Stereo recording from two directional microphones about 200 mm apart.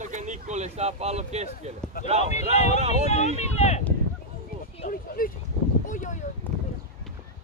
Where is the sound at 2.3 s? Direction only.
35° left (ahead or behind).